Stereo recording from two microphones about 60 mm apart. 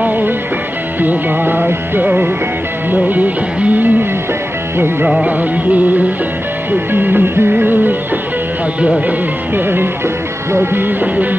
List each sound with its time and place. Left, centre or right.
0.0 s music: right
3.1 s music: right
5.0 s music: right
10.5 s music: right